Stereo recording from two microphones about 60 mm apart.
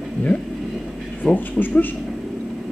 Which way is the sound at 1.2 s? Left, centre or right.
Left.